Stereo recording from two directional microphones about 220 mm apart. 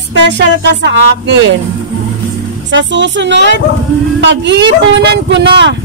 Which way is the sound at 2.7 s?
55° right (ahead or behind).